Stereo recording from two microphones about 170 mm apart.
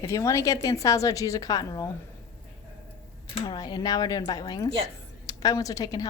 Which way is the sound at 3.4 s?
25° left (ahead or behind).